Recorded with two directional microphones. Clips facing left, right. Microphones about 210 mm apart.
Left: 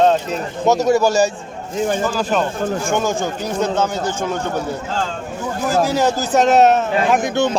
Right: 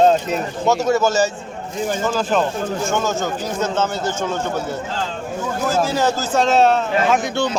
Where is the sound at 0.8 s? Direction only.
15° left (ahead or behind).